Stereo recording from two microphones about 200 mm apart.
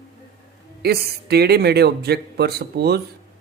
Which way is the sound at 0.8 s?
55° right (ahead or behind).